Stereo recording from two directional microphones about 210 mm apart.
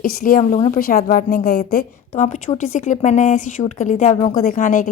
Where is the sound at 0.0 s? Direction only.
45° left (ahead or behind).